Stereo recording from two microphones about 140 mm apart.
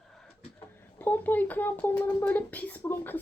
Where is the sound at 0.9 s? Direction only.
15° left (ahead or behind).